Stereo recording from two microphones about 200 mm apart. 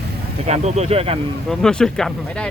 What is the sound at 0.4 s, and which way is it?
Speech, 35° right (ahead or behind).